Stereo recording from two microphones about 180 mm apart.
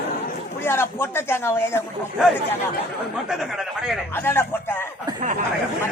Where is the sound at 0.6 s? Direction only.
15° left (ahead or behind).